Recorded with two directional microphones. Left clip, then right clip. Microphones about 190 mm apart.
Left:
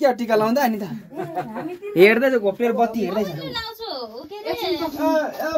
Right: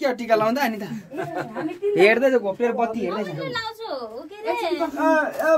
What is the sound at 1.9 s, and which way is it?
Speech, 40° left (ahead or behind).